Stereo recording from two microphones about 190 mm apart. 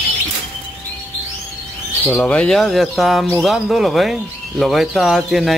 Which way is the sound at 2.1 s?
5° left (ahead or behind).